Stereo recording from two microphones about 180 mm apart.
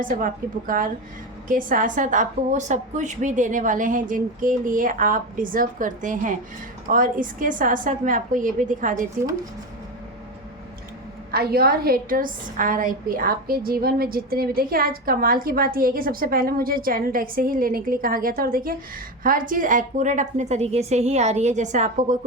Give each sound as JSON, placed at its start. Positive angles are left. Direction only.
{"t": 0.7, "sound": "a woman's voice", "side_deg": -50}
{"t": 11.3, "sound": "a woman's voice", "side_deg": -60}